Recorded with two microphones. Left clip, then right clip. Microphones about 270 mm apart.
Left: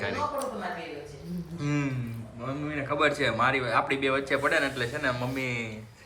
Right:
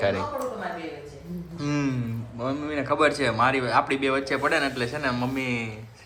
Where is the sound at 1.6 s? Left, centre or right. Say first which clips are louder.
Right 4 dB; centre.